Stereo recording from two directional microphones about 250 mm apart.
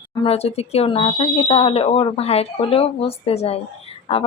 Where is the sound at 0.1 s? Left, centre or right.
Left.